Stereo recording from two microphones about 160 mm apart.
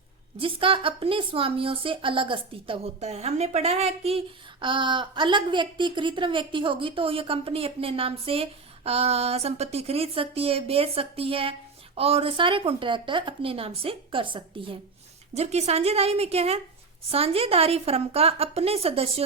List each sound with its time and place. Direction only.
0.3 s a woman's voice: 35° right (ahead or behind)